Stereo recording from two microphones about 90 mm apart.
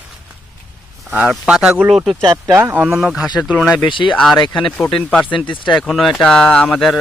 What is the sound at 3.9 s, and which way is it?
Speech, 65° left (ahead or behind).